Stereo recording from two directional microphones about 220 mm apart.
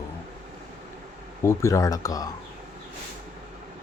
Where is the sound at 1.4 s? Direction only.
15° left (ahead or behind).